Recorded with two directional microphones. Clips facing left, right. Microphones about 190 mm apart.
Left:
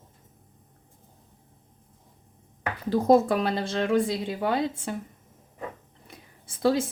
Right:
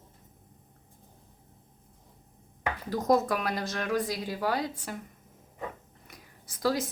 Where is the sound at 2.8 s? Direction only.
30° left (ahead or behind).